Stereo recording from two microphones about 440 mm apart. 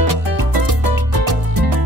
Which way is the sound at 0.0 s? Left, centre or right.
Right.